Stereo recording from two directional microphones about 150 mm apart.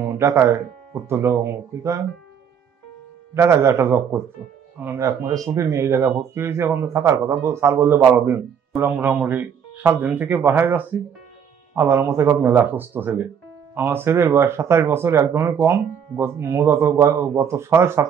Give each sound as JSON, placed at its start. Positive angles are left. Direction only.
{"t": 0.0, "sound": "speech", "side_deg": -15}
{"t": 3.3, "sound": "speech", "side_deg": -15}